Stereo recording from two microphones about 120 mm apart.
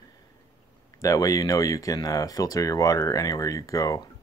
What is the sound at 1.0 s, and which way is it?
Speech, 30° left (ahead or behind).